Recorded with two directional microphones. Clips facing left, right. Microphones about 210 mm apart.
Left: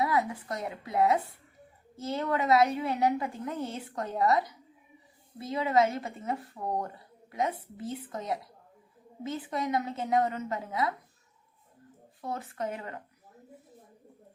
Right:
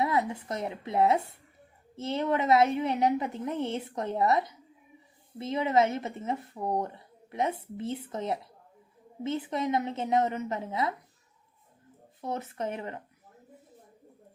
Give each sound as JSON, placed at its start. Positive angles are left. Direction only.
{"t": 0.0, "sound": "speech", "side_deg": -25}
{"t": 12.2, "sound": "speech", "side_deg": -25}